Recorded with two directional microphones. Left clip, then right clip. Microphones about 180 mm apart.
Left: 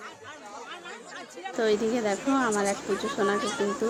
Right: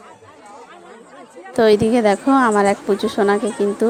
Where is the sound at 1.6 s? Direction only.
45° right (ahead or behind).